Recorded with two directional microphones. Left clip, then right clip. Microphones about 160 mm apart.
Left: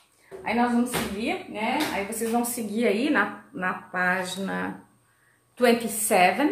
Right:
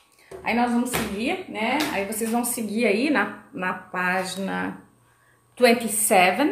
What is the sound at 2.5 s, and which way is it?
A woman's voice, 15° right (ahead or behind).